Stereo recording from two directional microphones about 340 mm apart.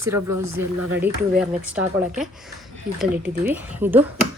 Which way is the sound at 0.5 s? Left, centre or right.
Centre.